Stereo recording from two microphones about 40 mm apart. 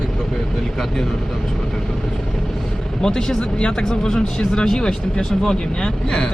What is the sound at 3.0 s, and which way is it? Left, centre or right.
Speech, centre.